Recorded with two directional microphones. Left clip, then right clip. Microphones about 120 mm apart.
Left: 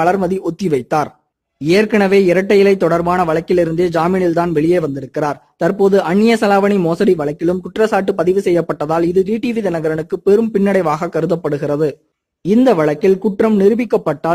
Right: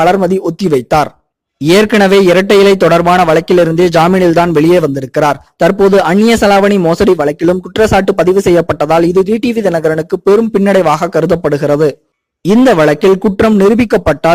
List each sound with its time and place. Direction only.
0.0 s speech: 40° right (ahead or behind)
1.6 s a man's voice: 55° right (ahead or behind)